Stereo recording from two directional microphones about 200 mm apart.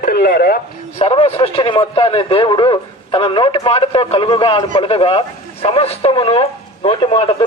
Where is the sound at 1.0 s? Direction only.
25° left (ahead or behind).